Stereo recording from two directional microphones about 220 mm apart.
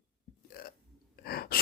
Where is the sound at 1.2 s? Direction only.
45° left (ahead or behind).